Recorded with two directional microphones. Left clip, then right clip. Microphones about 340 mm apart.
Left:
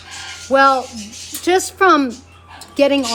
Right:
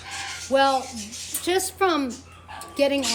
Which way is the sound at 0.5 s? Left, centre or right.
Centre.